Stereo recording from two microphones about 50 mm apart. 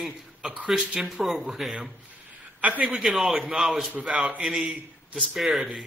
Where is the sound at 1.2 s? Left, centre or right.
Centre.